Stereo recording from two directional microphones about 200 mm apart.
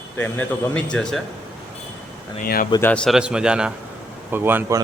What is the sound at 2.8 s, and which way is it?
A man's voice, 5° left (ahead or behind).